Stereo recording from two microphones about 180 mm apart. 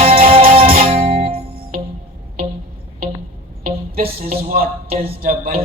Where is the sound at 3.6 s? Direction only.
55° right (ahead or behind).